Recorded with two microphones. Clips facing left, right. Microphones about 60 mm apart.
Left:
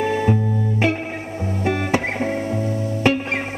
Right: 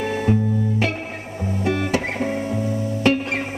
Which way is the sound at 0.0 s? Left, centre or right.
Centre.